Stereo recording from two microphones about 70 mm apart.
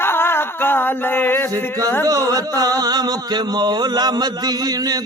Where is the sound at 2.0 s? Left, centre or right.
Right.